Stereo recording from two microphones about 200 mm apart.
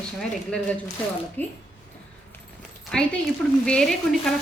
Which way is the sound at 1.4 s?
10° left (ahead or behind).